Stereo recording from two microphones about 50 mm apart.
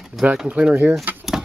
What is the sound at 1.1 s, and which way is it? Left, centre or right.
Speech, right.